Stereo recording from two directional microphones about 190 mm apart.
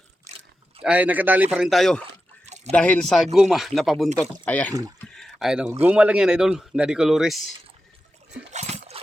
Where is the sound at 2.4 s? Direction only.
35° right (ahead or behind).